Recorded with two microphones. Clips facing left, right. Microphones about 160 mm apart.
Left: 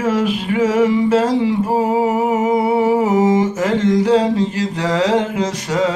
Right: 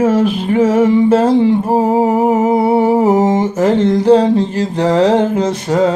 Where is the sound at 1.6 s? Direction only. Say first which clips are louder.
Right 4 dB; 30° right (ahead or behind).